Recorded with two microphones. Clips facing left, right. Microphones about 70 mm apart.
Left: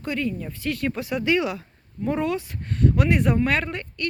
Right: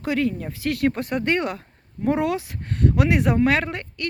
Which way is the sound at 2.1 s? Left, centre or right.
Right.